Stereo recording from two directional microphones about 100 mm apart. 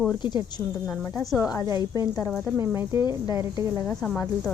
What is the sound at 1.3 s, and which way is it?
Speech, 35° left (ahead or behind).